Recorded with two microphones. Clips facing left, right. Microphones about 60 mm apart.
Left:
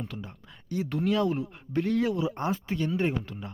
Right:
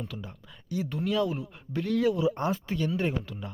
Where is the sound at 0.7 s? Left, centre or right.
Left.